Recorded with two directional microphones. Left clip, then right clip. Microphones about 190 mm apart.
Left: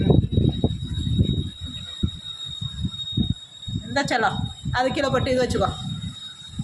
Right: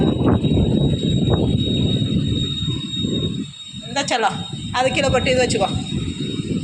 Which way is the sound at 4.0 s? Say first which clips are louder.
Right 2 dB; 10° left (ahead or behind).